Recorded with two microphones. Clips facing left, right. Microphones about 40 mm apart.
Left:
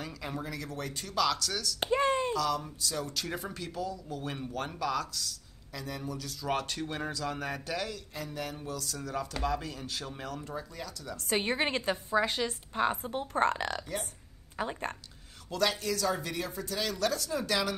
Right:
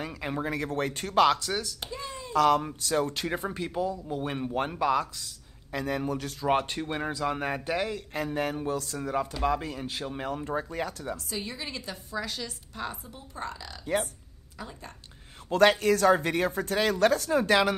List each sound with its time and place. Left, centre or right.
0.0 s speech: right
1.4 s a man's voice: right
1.8 s a sound: left
2.3 s a man's voice: right
5.7 s speech: right
6.4 s a man's voice: right
8.1 s a man's voice: right
11.2 s a woman's voice: left
13.1 s speech: left
14.6 s speech: left
15.5 s speech: right